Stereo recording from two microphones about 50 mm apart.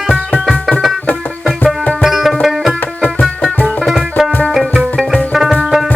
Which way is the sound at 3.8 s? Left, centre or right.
Centre.